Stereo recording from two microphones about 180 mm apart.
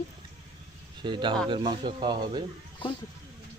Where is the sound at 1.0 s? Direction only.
25° right (ahead or behind).